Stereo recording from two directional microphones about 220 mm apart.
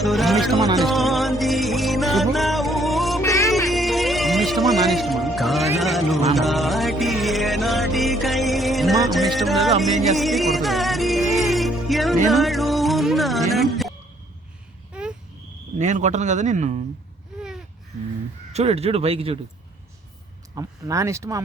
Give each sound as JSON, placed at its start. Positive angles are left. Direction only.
{"t": 0.0, "sound": "music", "side_deg": 0}
{"t": 3.2, "sound": "music", "side_deg": 15}
{"t": 3.7, "sound": "music", "side_deg": 0}
{"t": 14.9, "sound": "a sound", "side_deg": -5}
{"t": 15.8, "sound": "speech", "side_deg": -30}
{"t": 18.5, "sound": "speech", "side_deg": -30}
{"t": 20.6, "sound": "speech", "side_deg": -15}